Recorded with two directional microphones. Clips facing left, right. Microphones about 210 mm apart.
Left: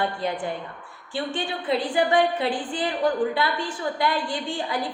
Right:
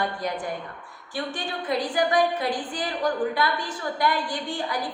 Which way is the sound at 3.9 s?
25° left (ahead or behind).